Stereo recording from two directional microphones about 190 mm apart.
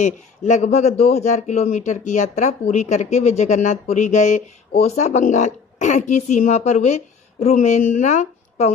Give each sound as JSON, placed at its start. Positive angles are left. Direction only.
{"t": 0.0, "sound": "a man's voice", "side_deg": 40}